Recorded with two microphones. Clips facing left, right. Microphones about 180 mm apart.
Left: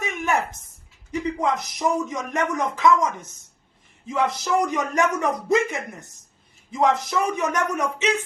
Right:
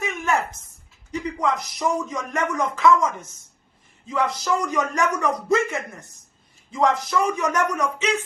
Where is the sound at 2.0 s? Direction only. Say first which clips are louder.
Left 1 dB; 20° left (ahead or behind).